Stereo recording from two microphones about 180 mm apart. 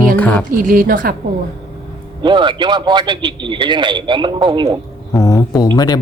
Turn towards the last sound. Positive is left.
turn(degrees=20)  # may be behind; listen again after turning